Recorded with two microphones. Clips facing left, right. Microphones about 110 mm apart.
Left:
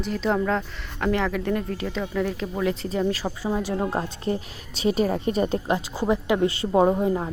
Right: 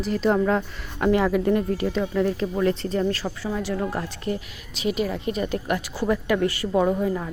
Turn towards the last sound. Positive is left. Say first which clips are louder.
# left 2 dB
turn(degrees=30)  # may be behind; listen again after turning